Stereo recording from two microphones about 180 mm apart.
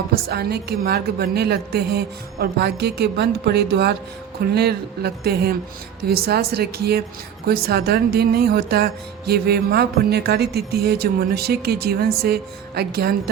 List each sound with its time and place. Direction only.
0.1 s speech: 60° right (ahead or behind)